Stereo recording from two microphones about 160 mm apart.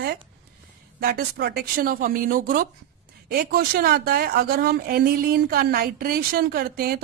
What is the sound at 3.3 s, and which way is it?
Speech, 70° right (ahead or behind).